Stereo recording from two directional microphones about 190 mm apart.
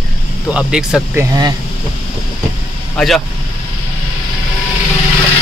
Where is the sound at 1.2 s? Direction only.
20° right (ahead or behind).